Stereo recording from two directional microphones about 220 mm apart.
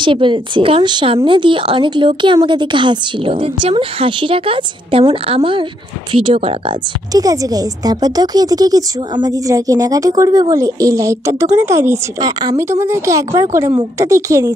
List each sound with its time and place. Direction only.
0.0 s speech: 20° right (ahead or behind)